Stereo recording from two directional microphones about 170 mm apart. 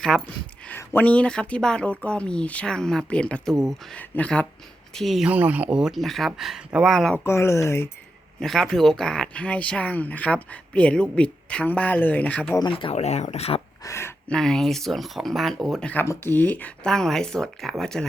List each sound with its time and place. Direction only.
0.1 s speech: 5° right (ahead or behind)
0.7 s speech: 10° left (ahead or behind)
7.3 s speech: 15° left (ahead or behind)
8.4 s speech: 5° left (ahead or behind)
12.5 s speech: 30° left (ahead or behind)
13.8 s a sound: 15° left (ahead or behind)
14.3 s speech: 5° left (ahead or behind)